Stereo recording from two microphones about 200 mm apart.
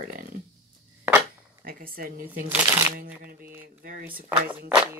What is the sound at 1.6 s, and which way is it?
Speech, 45° right (ahead or behind).